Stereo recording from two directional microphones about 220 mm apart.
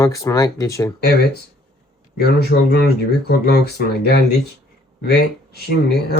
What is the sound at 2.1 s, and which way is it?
Speech, 45° left (ahead or behind).